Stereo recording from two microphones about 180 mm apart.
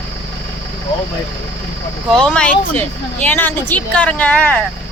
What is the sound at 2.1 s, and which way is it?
Speech, 5° left (ahead or behind).